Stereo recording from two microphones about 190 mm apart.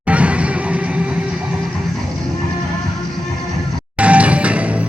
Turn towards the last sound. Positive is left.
turn(degrees=-5)  # may be behind; listen again after turning